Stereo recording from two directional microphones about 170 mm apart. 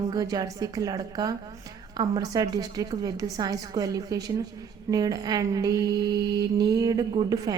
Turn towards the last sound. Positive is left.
turn(degrees=-20)  # may be behind; listen again after turning